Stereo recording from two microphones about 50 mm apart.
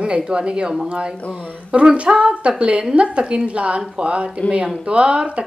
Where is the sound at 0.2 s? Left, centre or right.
Centre.